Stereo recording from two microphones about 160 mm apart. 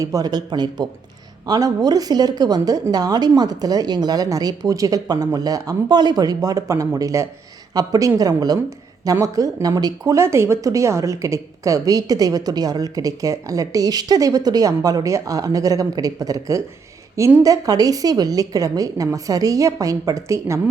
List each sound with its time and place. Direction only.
0.0 s speech: 20° right (ahead or behind)